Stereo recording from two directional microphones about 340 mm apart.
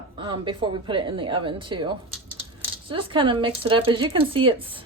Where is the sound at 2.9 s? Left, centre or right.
Centre.